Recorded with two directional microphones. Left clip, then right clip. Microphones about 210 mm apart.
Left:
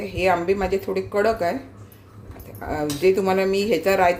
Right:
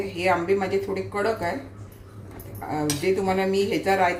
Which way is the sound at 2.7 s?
50° left (ahead or behind).